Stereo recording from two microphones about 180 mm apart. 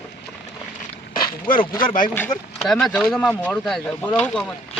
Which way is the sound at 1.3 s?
50° left (ahead or behind).